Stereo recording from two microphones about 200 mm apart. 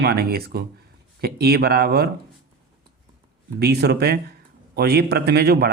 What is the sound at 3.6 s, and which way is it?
A man's voice, 55° right (ahead or behind).